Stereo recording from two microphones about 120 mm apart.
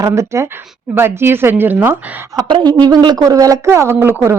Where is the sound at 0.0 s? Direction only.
25° right (ahead or behind).